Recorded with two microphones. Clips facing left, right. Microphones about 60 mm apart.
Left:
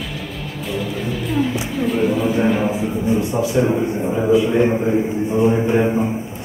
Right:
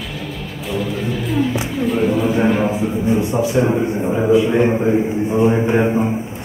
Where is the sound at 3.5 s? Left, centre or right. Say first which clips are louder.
Even; centre.